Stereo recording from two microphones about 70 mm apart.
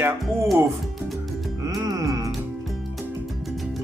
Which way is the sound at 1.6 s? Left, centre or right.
Right.